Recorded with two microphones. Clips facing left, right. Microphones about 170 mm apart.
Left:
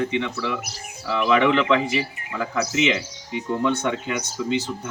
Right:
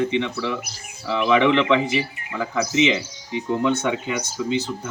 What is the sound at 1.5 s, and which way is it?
Speech, 15° right (ahead or behind).